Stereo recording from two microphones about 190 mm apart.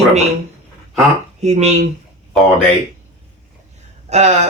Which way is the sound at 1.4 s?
35° right (ahead or behind).